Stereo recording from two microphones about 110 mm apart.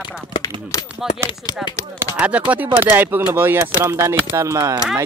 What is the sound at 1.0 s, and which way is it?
Speech, 5° right (ahead or behind).